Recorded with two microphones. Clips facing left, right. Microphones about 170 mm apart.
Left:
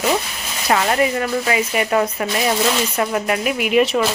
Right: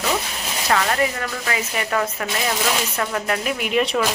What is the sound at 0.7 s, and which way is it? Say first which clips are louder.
Speech: left 4 dB; 20° left (ahead or behind).